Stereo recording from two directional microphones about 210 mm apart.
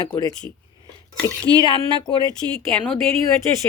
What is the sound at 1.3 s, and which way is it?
Speech, 20° right (ahead or behind).